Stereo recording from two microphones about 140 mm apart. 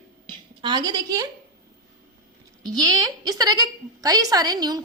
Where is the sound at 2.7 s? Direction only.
25° right (ahead or behind).